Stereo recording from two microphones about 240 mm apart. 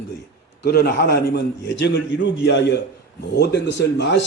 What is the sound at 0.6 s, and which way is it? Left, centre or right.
A man's voice, left.